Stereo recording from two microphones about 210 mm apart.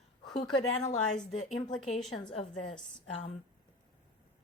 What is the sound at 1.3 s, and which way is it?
Speech, 35° left (ahead or behind).